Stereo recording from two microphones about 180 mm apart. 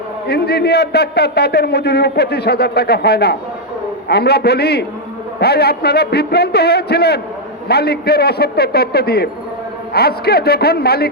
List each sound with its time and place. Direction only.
0.3 s a man's voice: 65° left (ahead or behind)